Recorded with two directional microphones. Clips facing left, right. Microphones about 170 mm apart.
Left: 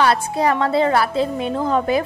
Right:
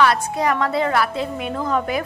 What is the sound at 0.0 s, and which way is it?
A woman's voice, 30° left (ahead or behind).